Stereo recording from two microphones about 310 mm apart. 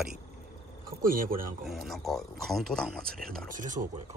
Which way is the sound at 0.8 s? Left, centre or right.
Right.